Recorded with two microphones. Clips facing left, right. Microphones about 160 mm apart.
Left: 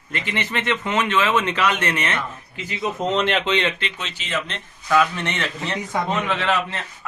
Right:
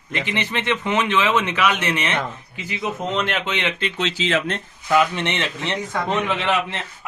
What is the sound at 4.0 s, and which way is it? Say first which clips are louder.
Speech: right 11 dB; 90° right.